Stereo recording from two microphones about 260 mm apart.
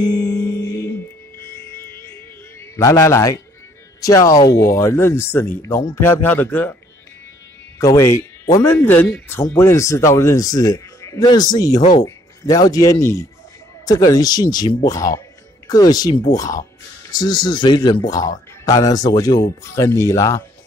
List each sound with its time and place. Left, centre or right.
0.0 s music: centre
2.7 s speech: centre
7.8 s speech: centre